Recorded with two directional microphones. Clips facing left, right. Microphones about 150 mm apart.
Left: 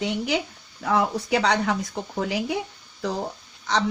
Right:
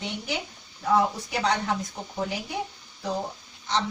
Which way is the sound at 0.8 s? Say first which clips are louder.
Left 1 dB; 70° left (ahead or behind).